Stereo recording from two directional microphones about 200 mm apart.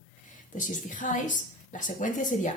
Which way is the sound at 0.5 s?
40° left (ahead or behind).